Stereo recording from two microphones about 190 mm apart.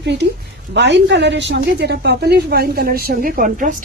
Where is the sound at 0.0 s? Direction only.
65° right (ahead or behind).